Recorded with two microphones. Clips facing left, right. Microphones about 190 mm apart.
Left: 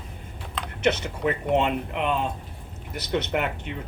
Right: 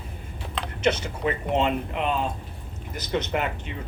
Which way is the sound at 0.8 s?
60° left (ahead or behind).